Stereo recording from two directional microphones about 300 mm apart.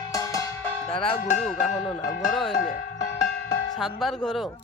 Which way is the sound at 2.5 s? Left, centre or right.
Left.